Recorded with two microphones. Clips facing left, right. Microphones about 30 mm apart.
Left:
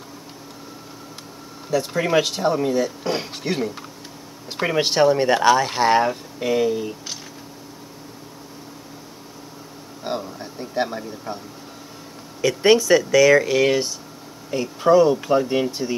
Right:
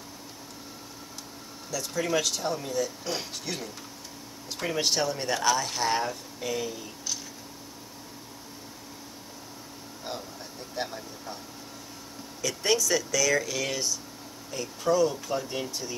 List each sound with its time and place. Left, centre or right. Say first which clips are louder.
1.7 s speech: left 8 dB; left
10.0 s speech: left 10 dB; left
12.4 s speech: left 11 dB; left